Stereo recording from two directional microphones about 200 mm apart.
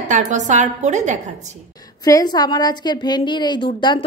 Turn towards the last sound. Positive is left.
turn(degrees=20)  # may be behind; listen again after turning